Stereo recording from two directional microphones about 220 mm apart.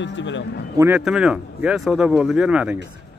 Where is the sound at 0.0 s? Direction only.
55° left (ahead or behind).